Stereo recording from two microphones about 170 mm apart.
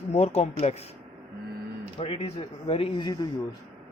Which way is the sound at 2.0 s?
35° left (ahead or behind).